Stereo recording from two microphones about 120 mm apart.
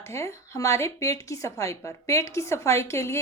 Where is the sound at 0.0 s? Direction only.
25° left (ahead or behind).